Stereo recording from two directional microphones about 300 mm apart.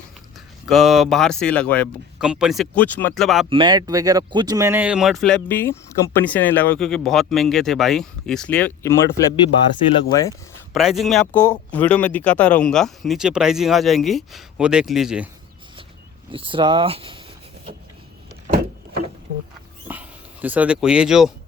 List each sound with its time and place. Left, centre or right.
0.6 s speech: centre
3.5 s speech: centre
10.8 s speech: centre
16.3 s speech: centre
19.9 s speech: centre